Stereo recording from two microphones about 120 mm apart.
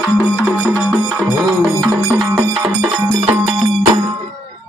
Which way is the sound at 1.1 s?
10° left (ahead or behind).